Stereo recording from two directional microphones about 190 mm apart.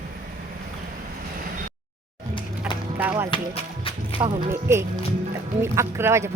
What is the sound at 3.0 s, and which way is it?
Music, 10° right (ahead or behind).